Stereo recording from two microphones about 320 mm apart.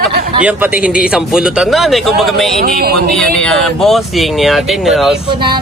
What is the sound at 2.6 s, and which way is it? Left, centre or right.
Speech, right.